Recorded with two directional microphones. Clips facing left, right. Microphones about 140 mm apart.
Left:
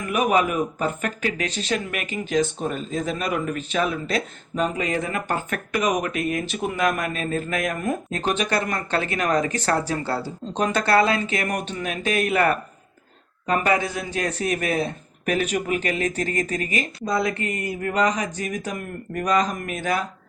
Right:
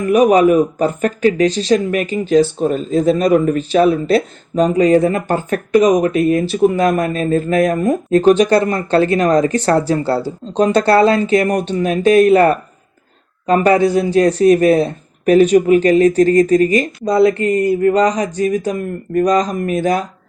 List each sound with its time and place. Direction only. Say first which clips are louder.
0.0 s speech: right 10 dB; 35° right (ahead or behind)